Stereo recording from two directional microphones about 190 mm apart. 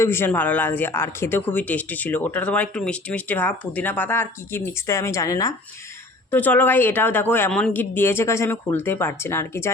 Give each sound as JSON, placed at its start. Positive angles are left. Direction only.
{"t": 0.0, "sound": "speech", "side_deg": 10}